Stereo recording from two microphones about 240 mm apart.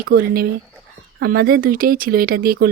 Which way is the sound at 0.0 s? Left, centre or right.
Right.